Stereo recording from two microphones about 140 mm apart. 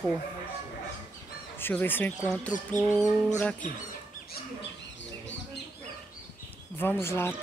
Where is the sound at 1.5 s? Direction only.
15° left (ahead or behind).